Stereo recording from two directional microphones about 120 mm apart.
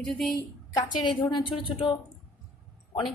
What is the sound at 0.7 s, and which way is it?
A woman's voice, 40° left (ahead or behind).